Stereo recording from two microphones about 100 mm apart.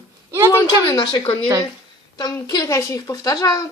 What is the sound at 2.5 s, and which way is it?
Speech, 35° left (ahead or behind).